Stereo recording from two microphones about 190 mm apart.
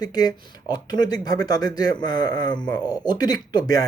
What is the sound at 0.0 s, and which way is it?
Speech, 20° left (ahead or behind).